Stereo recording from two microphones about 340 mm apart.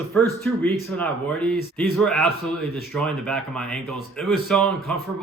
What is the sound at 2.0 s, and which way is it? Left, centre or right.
Speech, centre.